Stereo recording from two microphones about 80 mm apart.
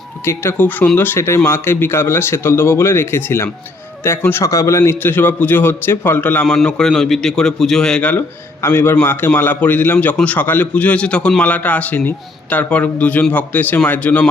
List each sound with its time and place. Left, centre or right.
0.5 s a man's voice: left
4.4 s speech: left
4.9 s a man's voice: left
6.7 s a man's voice: centre
8.6 s a man's voice: left